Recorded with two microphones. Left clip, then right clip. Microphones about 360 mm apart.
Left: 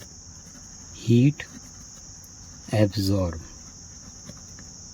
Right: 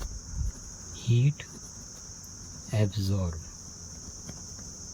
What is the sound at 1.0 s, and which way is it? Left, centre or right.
Cricket, centre.